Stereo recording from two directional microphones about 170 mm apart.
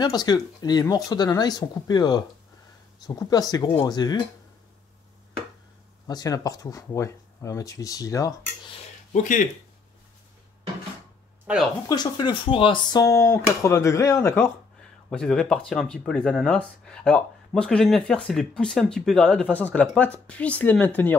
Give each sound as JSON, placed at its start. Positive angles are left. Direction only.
{"t": 0.0, "sound": "speech", "side_deg": 25}
{"t": 6.0, "sound": "speech", "side_deg": 20}
{"t": 9.1, "sound": "speech", "side_deg": 50}
{"t": 11.9, "sound": "speech", "side_deg": 25}
{"t": 13.0, "sound": "speech", "side_deg": 15}
{"t": 15.0, "sound": "speech", "side_deg": 5}